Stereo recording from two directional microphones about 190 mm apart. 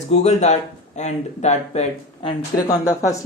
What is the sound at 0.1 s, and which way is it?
Speech, 35° left (ahead or behind).